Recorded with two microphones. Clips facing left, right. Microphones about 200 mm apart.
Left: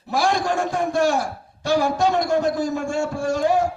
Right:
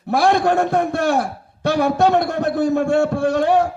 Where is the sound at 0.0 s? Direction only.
60° right (ahead or behind).